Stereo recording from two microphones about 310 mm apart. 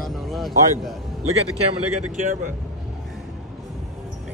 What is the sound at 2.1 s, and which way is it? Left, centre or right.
Speech, right.